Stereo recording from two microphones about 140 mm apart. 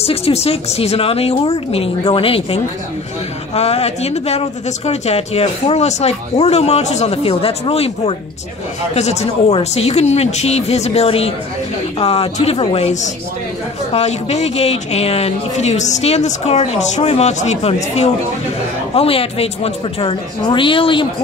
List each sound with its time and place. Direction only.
0.0 s speech: 45° left (ahead or behind)
18.9 s speech: 45° left (ahead or behind)